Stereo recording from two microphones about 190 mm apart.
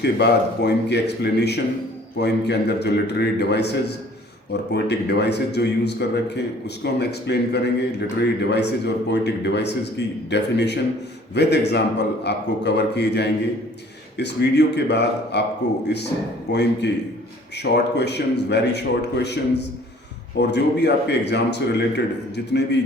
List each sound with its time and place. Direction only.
0.0 s a man's voice: 60° left (ahead or behind)
16.5 s a man's voice: 65° left (ahead or behind)